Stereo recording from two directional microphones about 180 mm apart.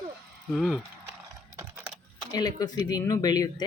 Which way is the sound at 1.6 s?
10° right (ahead or behind).